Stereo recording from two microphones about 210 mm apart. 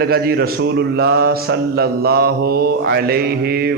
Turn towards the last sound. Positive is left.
turn(degrees=-45)  # may be behind; listen again after turning